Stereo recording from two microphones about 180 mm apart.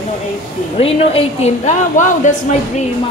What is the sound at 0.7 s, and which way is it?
A woman's voice, 30° left (ahead or behind).